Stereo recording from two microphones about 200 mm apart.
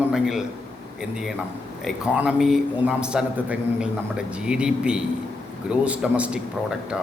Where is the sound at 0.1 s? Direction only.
Centre (ahead or behind).